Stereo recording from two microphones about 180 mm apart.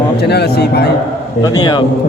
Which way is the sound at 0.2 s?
65° left (ahead or behind).